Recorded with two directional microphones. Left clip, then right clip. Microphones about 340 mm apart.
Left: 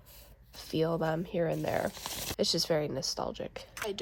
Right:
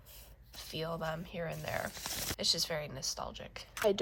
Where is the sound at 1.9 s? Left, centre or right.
Centre.